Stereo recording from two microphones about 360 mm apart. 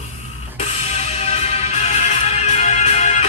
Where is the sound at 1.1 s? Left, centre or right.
Centre.